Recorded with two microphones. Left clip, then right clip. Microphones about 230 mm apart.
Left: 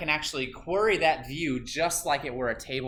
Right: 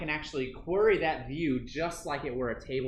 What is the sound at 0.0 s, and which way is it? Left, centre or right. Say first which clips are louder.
Speech: left 5 dB; centre.